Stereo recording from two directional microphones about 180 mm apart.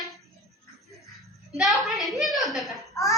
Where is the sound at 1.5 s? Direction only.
Centre (ahead or behind).